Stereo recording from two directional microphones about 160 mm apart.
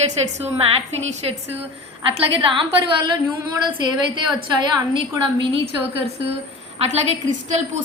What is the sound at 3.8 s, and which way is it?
A woman's voice, 30° right (ahead or behind).